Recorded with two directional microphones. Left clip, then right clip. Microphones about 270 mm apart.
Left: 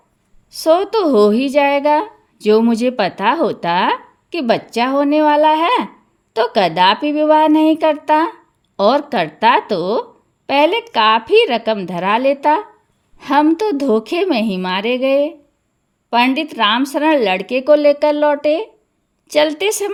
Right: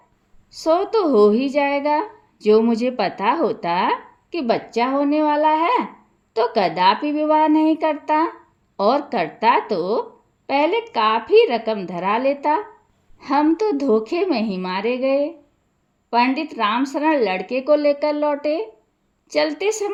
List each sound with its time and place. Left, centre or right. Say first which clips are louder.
0.6 s a woman's voice: left 4 dB; left
8.7 s a sound: left 5 dB; left
9.1 s a woman's voice: left 4 dB; left